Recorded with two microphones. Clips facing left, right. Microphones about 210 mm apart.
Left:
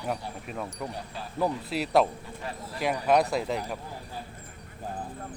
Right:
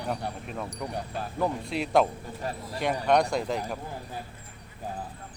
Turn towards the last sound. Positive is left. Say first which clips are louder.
# even
turn(degrees=0)  # may be behind; listen again after turning